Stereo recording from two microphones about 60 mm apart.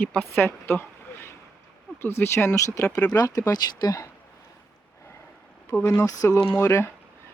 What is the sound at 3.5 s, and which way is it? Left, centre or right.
Speech, left.